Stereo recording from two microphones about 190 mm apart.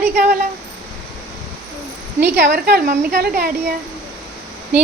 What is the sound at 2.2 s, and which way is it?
A woman's voice, 50° right (ahead or behind).